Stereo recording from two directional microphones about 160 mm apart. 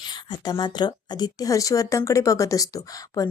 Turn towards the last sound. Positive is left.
turn(degrees=20)  # may be behind; listen again after turning